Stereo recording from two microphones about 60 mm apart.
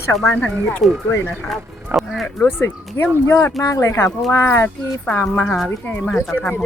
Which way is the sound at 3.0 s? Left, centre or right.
Left.